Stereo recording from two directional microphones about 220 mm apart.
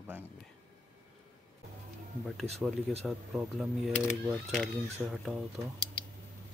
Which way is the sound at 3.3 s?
5° right (ahead or behind).